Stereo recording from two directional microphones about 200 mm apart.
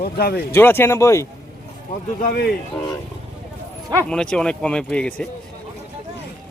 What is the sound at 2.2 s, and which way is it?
Speech, 50° left (ahead or behind).